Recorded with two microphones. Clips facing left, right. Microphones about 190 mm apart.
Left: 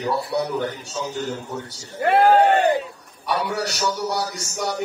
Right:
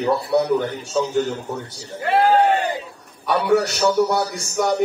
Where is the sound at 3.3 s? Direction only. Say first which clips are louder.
Right 7 dB; 50° right (ahead or behind).